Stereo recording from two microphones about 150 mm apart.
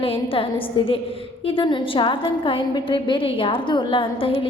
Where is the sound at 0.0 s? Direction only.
40° left (ahead or behind).